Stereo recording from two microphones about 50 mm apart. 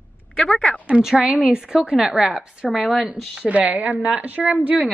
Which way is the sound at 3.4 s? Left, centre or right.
Right.